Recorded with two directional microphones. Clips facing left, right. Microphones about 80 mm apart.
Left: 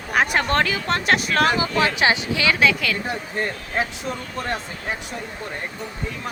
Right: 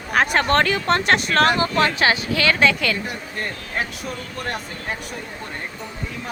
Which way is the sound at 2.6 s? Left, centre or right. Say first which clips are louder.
Right 1 dB; centre.